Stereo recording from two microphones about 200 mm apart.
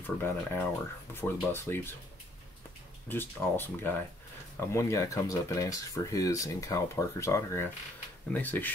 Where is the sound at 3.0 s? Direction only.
10° left (ahead or behind).